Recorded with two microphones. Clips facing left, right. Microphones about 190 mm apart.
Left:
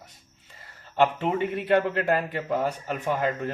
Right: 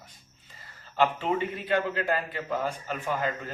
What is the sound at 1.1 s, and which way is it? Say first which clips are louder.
Speech: left 3 dB; 60° left (ahead or behind).